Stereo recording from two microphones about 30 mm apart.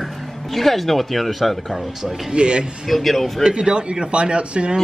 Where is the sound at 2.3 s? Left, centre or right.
Right.